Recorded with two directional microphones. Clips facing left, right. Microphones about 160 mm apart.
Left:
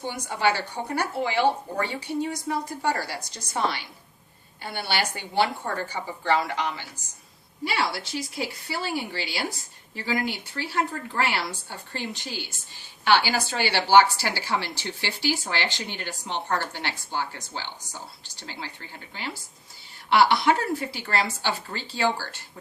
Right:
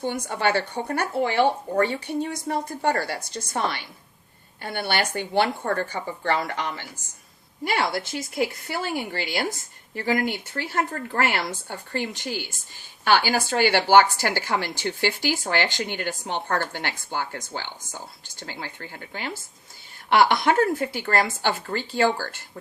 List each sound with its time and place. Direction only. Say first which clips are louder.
0.1 s a woman's voice: even; 55° right (ahead or behind)